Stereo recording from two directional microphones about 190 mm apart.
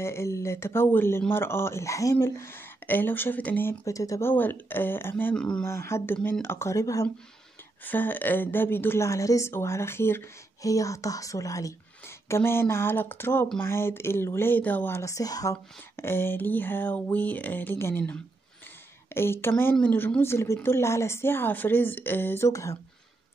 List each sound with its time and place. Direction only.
0.0 s speech: 15° left (ahead or behind)